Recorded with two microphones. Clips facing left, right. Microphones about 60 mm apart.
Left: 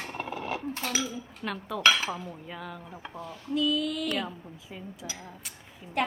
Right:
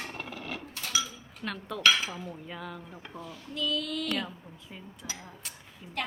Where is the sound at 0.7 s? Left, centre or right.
Left.